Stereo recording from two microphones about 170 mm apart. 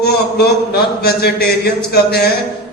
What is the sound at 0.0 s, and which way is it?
A man's voice, 70° left (ahead or behind).